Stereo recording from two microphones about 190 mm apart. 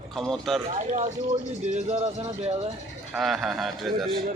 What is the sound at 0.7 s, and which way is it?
Speech, 40° right (ahead or behind).